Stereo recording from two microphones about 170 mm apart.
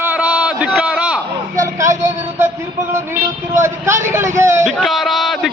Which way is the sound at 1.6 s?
20° right (ahead or behind).